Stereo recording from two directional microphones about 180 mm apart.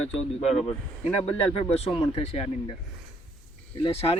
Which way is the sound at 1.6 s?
35° left (ahead or behind).